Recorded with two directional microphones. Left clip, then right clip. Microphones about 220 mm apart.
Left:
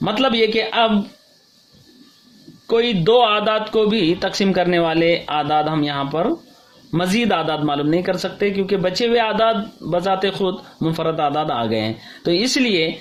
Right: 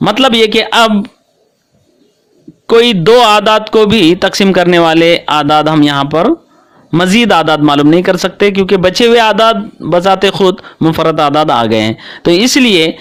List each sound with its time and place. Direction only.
0.0 s a man's voice: 45° right (ahead or behind)
2.6 s a man's voice: 45° right (ahead or behind)